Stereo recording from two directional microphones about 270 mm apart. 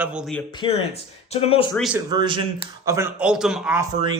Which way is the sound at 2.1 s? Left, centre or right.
Centre.